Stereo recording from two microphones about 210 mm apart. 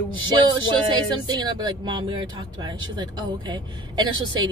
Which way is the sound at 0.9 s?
20° right (ahead or behind).